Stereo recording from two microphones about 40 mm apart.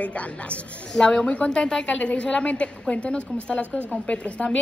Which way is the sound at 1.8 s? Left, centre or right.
Left.